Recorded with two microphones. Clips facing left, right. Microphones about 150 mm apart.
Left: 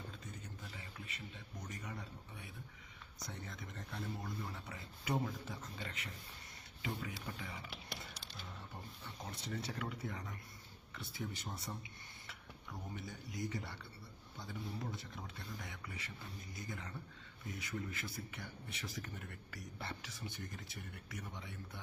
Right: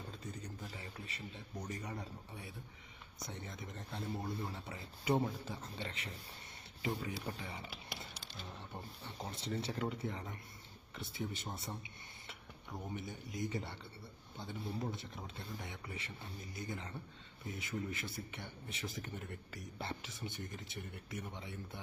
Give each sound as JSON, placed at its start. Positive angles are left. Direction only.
{"t": 0.3, "sound": "a man's voice", "side_deg": -35}
{"t": 3.2, "sound": "a man's voice", "side_deg": -20}
{"t": 7.7, "sound": "music", "side_deg": 0}
{"t": 8.4, "sound": "a man's voice", "side_deg": -30}